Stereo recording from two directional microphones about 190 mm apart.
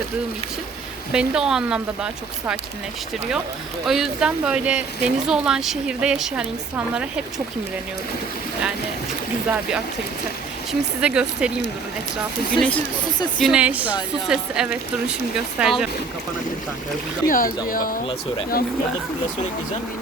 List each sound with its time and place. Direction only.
1.1 s speech: 5° right (ahead or behind)
3.8 s speech: centre (ahead or behind)
9.5 s speech: 5° right (ahead or behind)
12.5 s speech: 5° left (ahead or behind)
13.4 s speech: 5° right (ahead or behind)
17.2 s speech: 45° left (ahead or behind)